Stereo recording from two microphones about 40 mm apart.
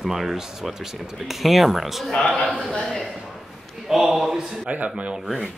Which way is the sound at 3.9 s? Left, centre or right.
Centre.